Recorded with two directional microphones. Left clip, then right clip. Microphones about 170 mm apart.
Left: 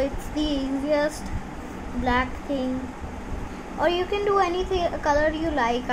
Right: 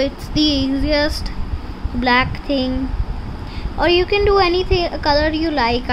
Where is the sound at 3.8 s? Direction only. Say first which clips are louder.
Right 8 dB; 40° right (ahead or behind).